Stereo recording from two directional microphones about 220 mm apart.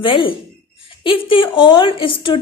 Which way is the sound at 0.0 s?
25° left (ahead or behind).